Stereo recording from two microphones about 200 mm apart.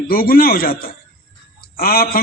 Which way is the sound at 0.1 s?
50° left (ahead or behind).